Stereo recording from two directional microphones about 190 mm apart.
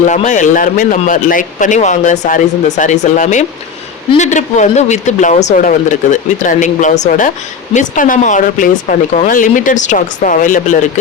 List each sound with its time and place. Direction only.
0.1 s a man's voice: 40° left (ahead or behind)